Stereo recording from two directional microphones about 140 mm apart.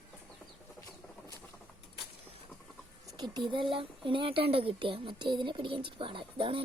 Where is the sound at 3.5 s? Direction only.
35° right (ahead or behind).